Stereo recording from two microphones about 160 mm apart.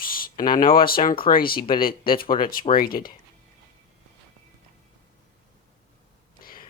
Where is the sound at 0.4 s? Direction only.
60° left (ahead or behind).